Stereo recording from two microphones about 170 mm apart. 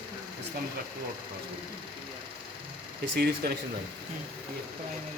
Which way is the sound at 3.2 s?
65° right (ahead or behind).